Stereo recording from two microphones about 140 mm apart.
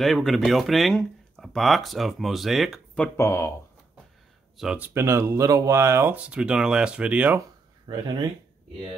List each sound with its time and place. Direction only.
0.0 s speech: centre (ahead or behind)
3.2 s speech: 20° left (ahead or behind)
4.6 s speech: 10° right (ahead or behind)
7.9 s speech: 30° right (ahead or behind)